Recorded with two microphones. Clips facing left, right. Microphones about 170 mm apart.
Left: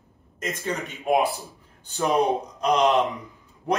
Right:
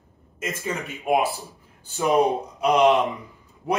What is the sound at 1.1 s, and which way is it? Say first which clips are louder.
Speech: even; 5° right (ahead or behind).